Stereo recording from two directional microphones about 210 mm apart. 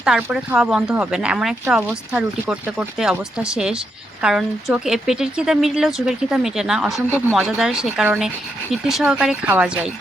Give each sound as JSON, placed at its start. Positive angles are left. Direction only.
{"t": 0.0, "sound": "speech", "side_deg": -5}